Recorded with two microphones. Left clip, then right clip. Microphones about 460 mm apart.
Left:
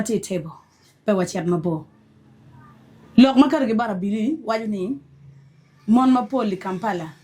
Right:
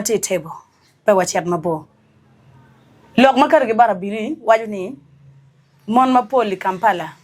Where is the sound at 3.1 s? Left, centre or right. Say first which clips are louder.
Right 5 dB; right.